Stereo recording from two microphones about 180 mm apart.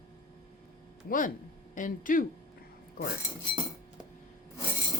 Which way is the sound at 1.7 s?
45° left (ahead or behind).